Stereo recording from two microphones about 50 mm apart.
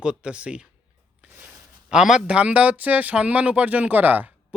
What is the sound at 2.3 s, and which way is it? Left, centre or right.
Speech, right.